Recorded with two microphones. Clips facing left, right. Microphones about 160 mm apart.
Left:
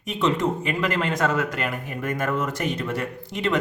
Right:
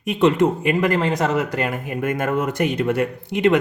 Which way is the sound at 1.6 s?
45° right (ahead or behind).